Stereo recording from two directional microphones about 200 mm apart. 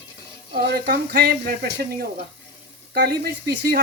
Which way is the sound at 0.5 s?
55° right (ahead or behind).